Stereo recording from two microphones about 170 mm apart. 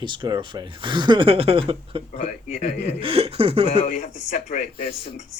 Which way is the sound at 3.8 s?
45° left (ahead or behind).